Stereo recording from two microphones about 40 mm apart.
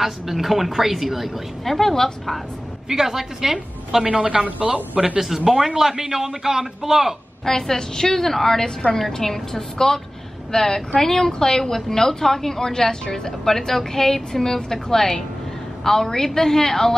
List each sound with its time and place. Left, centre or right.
0.0 s a woman's voice: centre
2.9 s a man's voice: centre
4.1 s a woman's voice: right
5.2 s a woman's voice: centre
7.4 s a woman's voice: centre